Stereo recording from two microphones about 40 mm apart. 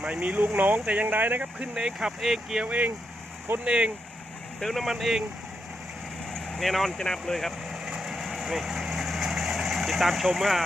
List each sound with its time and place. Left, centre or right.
0.1 s speech: right
0.3 s speech: right
1.5 s speech: centre
2.6 s speech: right
3.6 s speech: right
4.6 s speech: centre
6.3 s vehicle: centre
7.0 s speech: centre
7.7 s vehicle: centre